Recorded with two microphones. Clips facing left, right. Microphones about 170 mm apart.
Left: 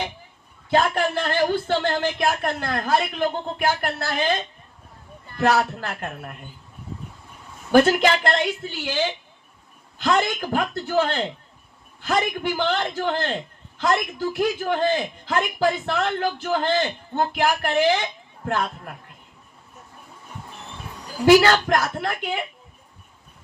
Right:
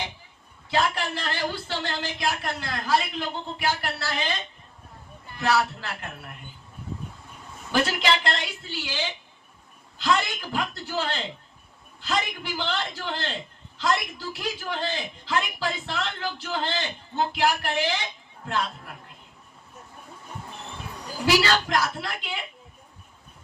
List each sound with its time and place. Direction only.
0.7 s a man's voice: 50° left (ahead or behind)
7.7 s a man's voice: 50° left (ahead or behind)
21.2 s a man's voice: 50° left (ahead or behind)